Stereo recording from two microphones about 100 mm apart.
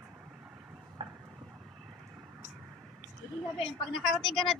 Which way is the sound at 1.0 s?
65° right (ahead or behind).